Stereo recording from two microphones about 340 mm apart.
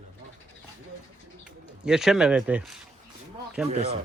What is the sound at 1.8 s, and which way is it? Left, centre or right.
Speech, centre.